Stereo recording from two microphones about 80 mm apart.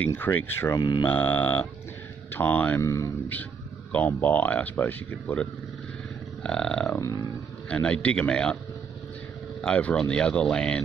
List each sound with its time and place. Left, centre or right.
0.0 s speech: left
0.7 s mantra: left
1.0 s speech: left
2.8 s burping: left
3.9 s speech: left
6.4 s a man's voice: centre
6.9 s burping: left
7.6 s a man's voice: centre
9.6 s a man's voice: centre